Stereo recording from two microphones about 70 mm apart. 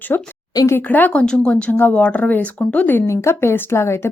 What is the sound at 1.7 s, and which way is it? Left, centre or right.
Speech, left.